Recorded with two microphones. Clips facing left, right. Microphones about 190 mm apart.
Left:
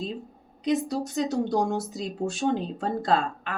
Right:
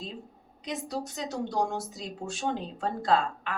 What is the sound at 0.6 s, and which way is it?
Speech, 35° left (ahead or behind).